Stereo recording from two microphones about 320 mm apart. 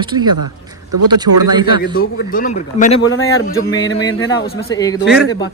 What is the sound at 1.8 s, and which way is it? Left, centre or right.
A man's voice, left.